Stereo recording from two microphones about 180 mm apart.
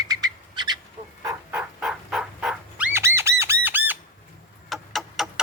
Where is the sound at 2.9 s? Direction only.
15° right (ahead or behind).